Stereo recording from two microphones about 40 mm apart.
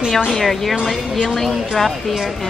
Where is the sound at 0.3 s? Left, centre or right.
Centre.